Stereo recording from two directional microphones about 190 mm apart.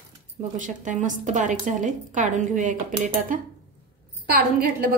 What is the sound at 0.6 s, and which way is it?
A woman's voice, 40° right (ahead or behind).